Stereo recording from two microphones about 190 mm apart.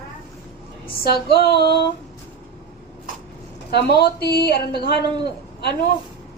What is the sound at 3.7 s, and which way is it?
Speech, 60° left (ahead or behind).